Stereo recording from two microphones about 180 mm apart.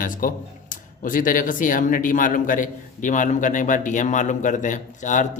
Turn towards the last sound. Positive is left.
turn(degrees=45)  # may be behind; listen again after turning